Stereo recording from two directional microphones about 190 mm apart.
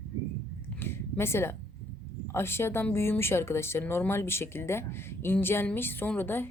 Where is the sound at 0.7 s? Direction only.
10° left (ahead or behind).